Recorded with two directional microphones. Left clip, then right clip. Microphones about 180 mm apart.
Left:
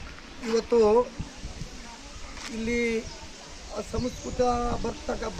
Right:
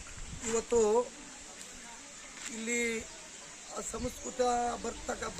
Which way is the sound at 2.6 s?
10° right (ahead or behind).